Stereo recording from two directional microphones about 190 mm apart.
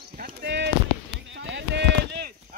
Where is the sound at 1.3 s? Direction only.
75° right (ahead or behind); by 2.3 s 60° right (ahead or behind).